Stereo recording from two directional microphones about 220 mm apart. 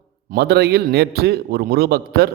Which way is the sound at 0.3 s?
45° right (ahead or behind).